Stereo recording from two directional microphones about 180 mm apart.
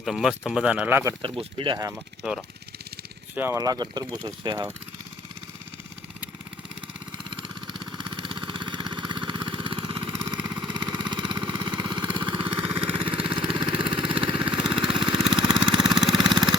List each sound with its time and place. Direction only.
0.0 s speech: centre (ahead or behind)
1.2 s speech: 30° right (ahead or behind)
1.9 s speech: centre (ahead or behind)
3.3 s speech: 15° right (ahead or behind)
7.3 s vehicle: 25° right (ahead or behind)
15.8 s vehicle: centre (ahead or behind)